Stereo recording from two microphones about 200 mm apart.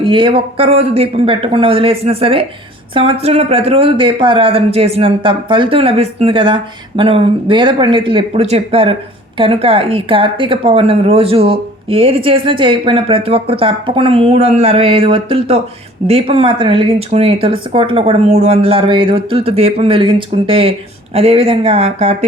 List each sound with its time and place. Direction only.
0.0 s speech: 25° right (ahead or behind)